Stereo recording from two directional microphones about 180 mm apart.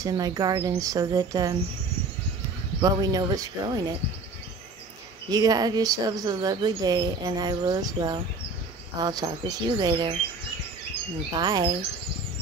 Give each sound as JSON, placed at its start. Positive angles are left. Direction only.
{"t": 0.0, "sound": "speech", "side_deg": -20}
{"t": 2.8, "sound": "speech", "side_deg": -20}
{"t": 5.3, "sound": "speech", "side_deg": -20}
{"t": 11.3, "sound": "speech", "side_deg": -25}